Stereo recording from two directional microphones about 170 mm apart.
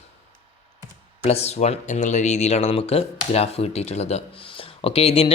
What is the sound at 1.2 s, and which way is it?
Speech, 40° left (ahead or behind).